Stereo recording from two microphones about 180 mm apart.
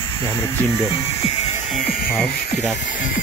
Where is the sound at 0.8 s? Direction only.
35° left (ahead or behind).